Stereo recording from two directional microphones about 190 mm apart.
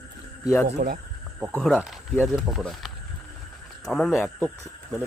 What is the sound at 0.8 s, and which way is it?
Speech, 45° right (ahead or behind).